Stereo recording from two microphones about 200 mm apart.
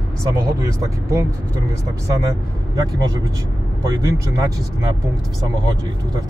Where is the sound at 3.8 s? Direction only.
15° right (ahead or behind).